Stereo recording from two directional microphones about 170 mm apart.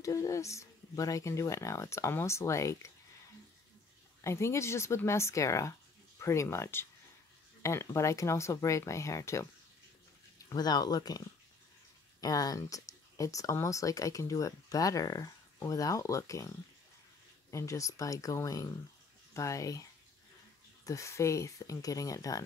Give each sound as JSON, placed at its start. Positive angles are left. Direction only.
{"t": 0.0, "sound": "speech", "side_deg": 20}
{"t": 4.2, "sound": "speech", "side_deg": 15}
{"t": 10.5, "sound": "speech", "side_deg": 25}
{"t": 17.5, "sound": "speech", "side_deg": 20}
{"t": 20.8, "sound": "speech", "side_deg": 20}